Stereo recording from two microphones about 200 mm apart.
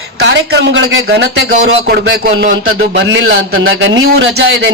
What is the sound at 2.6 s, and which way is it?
A man's voice, 80° right.